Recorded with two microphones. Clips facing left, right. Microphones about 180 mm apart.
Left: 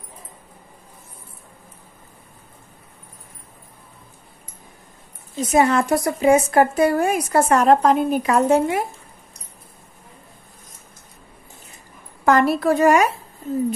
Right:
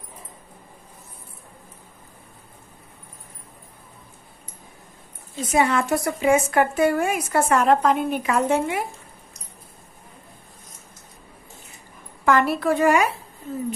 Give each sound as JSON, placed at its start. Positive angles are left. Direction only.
{"t": 5.5, "sound": "a woman's voice", "side_deg": 40}
{"t": 12.3, "sound": "a woman's voice", "side_deg": 40}